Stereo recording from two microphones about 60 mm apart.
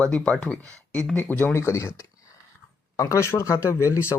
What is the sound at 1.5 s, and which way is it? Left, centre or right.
Speech, left.